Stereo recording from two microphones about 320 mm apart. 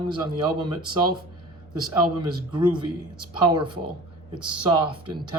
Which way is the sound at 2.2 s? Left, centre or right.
Centre.